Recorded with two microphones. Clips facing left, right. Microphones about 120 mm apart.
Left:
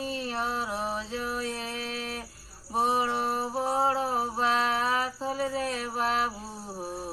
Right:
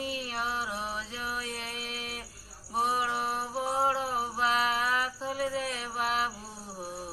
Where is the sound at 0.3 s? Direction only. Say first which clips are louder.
Left 3 dB; 35° left (ahead or behind).